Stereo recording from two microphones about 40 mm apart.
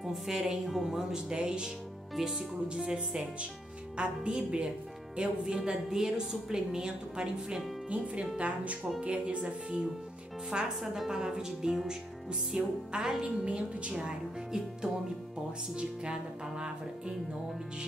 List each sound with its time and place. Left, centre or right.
0.0 s a woman's voice: centre
1.1 s a woman's voice: right
7.9 s a woman's voice: right
10.8 s a woman's voice: centre; by 14.0 s right
14.0 s a woman's voice: centre